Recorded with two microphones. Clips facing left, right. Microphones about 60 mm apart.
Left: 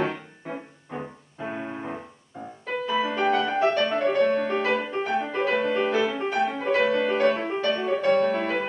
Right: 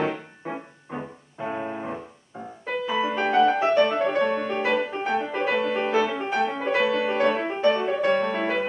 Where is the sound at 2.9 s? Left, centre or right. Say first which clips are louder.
Right 3 dB; centre.